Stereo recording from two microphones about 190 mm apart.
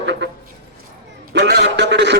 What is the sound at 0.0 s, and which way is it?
Speech, 70° right (ahead or behind).